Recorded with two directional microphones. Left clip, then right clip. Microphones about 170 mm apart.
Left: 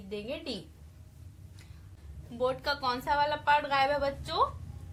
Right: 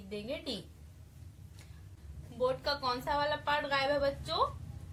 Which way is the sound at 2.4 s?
30° left (ahead or behind).